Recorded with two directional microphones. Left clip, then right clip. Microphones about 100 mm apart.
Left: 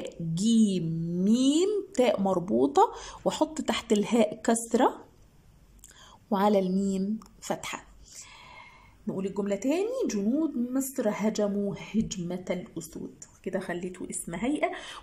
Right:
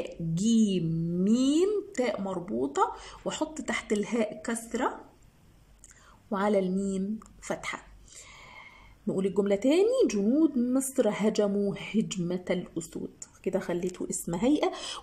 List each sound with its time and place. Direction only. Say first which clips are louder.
0.3 s a sound: left 1 dB; centre (ahead or behind)
2.0 s speech: left 6 dB; 20° left (ahead or behind)
6.2 s a sound: left 2 dB; 10° left (ahead or behind)
9.0 s speech: right 4 dB; 15° right (ahead or behind)
13.4 s speech: right 3 dB; 15° right (ahead or behind)
14.2 s speech: right 2 dB; 25° right (ahead or behind)